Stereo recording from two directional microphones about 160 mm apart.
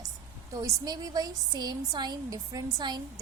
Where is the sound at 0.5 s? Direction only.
25° right (ahead or behind).